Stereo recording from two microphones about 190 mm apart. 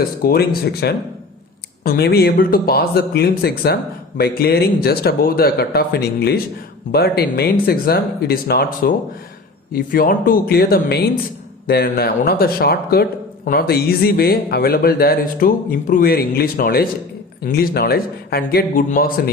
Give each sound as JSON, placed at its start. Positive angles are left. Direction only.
{"t": 0.2, "sound": "speech", "side_deg": 55}